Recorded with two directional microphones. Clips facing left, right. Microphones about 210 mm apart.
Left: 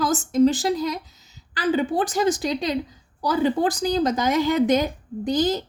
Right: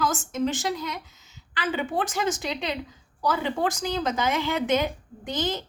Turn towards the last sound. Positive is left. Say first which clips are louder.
# left 7 dB
turn(degrees=35)  # may be behind; listen again after turning